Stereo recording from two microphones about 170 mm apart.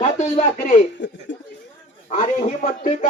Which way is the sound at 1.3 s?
90° left.